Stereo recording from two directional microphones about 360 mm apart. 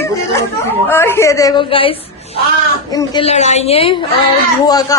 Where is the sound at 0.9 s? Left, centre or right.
Centre.